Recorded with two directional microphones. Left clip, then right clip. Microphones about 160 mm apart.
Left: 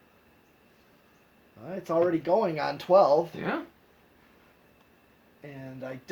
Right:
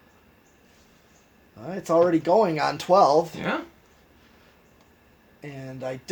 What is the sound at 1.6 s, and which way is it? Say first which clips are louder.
Speech: right 6 dB; 45° right (ahead or behind).